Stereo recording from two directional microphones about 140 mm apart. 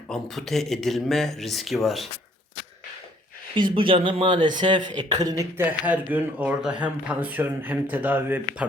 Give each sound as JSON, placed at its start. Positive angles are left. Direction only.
{"t": 0.1, "sound": "speech", "side_deg": 0}
{"t": 3.5, "sound": "speech", "side_deg": -35}
{"t": 5.8, "sound": "speech", "side_deg": -10}